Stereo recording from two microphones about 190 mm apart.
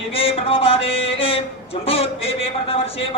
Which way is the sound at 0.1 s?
30° left (ahead or behind).